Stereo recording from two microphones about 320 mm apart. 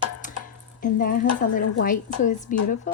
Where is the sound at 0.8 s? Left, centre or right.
Left.